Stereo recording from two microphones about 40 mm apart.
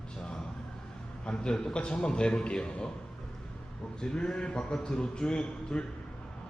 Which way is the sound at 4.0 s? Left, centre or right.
Centre.